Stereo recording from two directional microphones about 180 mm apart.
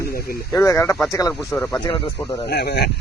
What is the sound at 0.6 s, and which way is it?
A man's voice, 15° left (ahead or behind).